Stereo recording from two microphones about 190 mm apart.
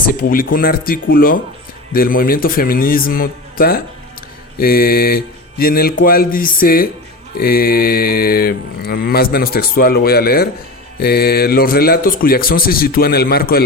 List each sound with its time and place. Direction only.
0.1 s mantra: 50° left (ahead or behind)